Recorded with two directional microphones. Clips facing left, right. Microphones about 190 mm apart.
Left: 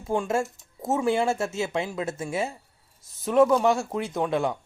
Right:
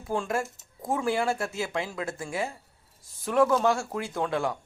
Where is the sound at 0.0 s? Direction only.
20° left (ahead or behind).